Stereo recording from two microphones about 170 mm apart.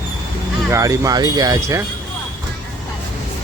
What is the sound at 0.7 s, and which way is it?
Speech, 20° right (ahead or behind).